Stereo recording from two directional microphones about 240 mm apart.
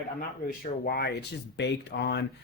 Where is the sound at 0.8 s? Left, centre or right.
Left.